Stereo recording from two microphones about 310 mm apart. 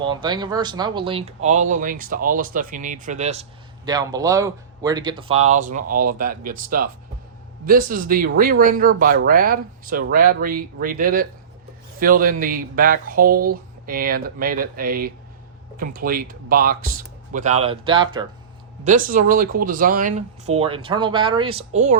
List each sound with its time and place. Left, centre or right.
0.0 s speech: centre
19.0 s speech: right